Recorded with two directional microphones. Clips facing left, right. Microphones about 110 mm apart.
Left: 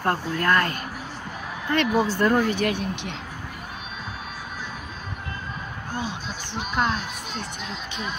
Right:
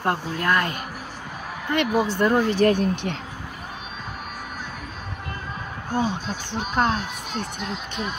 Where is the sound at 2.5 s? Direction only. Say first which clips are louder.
Right 6 dB; 40° right (ahead or behind).